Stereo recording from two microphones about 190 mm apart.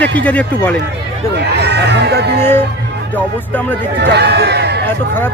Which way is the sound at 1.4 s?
60° right (ahead or behind).